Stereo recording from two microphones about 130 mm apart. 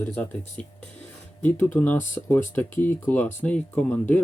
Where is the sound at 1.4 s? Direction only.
15° left (ahead or behind).